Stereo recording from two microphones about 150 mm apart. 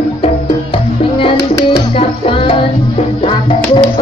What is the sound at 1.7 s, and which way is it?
Music, 40° left (ahead or behind).